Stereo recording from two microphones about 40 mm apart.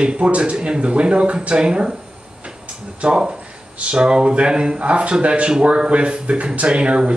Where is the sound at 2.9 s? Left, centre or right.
Right.